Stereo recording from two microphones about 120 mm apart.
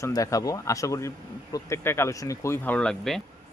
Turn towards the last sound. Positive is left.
turn(degrees=5)  # may be behind; listen again after turning